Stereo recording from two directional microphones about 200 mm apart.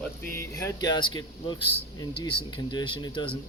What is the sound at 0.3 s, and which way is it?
Speech, 15° left (ahead or behind).